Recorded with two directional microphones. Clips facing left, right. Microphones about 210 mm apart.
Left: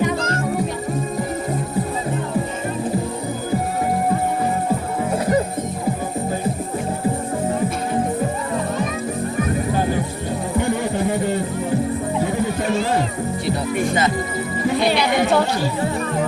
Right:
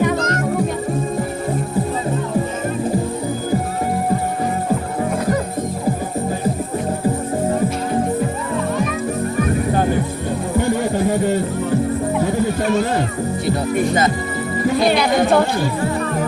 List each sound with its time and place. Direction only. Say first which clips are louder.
13.7 s music: right 3 dB; 45° right (ahead or behind)
14.8 s speech: right 3 dB; 50° right (ahead or behind)